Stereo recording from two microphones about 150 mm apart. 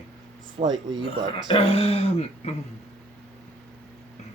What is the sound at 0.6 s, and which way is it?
Speech, 30° right (ahead or behind).